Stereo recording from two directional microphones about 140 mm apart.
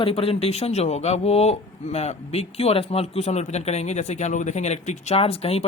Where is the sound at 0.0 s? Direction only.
45° left (ahead or behind).